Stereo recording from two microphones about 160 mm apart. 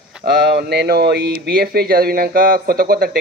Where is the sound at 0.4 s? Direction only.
90° right.